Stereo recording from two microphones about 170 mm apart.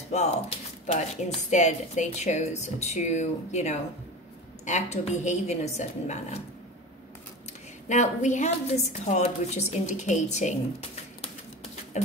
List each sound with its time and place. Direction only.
0.1 s a woman's voice: 40° left (ahead or behind)
7.9 s a woman's voice: 45° left (ahead or behind)